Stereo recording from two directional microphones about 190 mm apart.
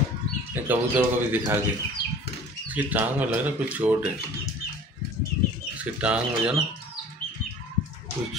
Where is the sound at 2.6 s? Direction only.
10° right (ahead or behind).